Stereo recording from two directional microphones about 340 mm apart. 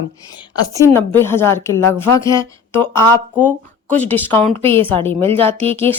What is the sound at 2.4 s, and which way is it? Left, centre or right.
Speech, centre.